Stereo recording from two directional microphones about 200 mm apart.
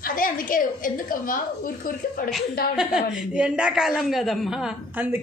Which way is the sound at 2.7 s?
5° right (ahead or behind).